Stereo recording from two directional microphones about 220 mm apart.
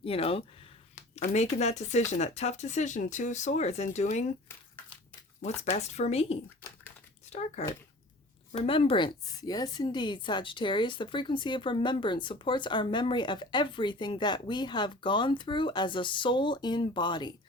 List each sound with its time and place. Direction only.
0.0 s speech: 25° left (ahead or behind)
5.4 s a woman's voice: 30° left (ahead or behind)
8.6 s a woman's voice: 25° left (ahead or behind)